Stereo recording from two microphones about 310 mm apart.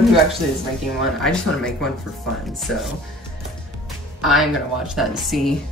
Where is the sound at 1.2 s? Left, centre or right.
Centre.